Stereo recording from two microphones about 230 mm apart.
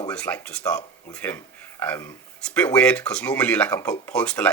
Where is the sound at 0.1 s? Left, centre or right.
Centre.